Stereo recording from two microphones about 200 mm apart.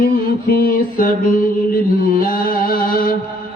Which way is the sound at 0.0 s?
45° left (ahead or behind).